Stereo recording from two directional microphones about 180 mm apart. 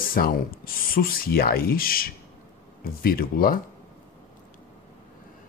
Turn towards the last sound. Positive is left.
turn(degrees=55)  # may be behind; listen again after turning